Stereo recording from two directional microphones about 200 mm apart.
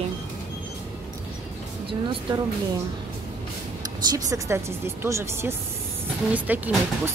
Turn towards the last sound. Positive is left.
turn(degrees=-10)  # may be behind; listen again after turning